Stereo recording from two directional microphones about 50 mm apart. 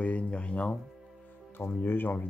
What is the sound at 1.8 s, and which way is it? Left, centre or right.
Speech, left.